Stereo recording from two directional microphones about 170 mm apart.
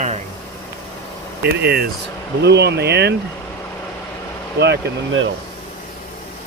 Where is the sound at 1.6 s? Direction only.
65° right (ahead or behind).